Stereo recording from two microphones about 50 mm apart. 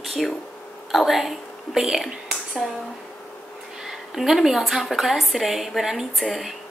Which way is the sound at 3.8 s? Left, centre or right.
Centre.